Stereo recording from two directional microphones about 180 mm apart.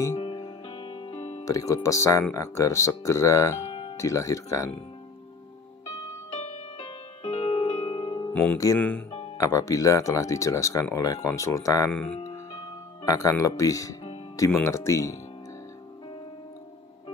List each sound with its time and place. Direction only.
0.2 s music: 30° left (ahead or behind)
1.4 s speech: 20° left (ahead or behind)
3.6 s music: 30° left (ahead or behind)
3.9 s speech: 15° left (ahead or behind)
6.3 s music: 30° left (ahead or behind)
8.3 s music: 10° left (ahead or behind)
8.7 s speech: 5° left (ahead or behind)
9.4 s speech: 20° left (ahead or behind)
11.9 s speech: 5° left (ahead or behind)
13.0 s speech: 20° left (ahead or behind)